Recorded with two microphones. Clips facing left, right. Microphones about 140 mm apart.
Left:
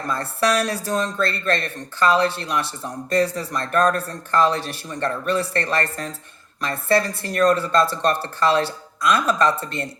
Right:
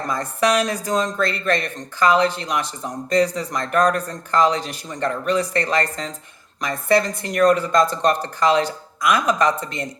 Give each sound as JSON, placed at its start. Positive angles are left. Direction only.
{"t": 0.1, "sound": "speech", "side_deg": -15}